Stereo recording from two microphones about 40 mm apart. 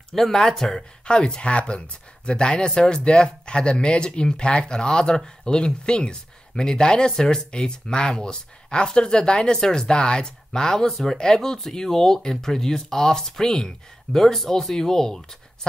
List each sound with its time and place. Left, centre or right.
0.1 s speech: centre
1.0 s speech: left